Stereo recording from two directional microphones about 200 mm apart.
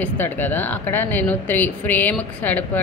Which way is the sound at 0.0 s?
10° left (ahead or behind).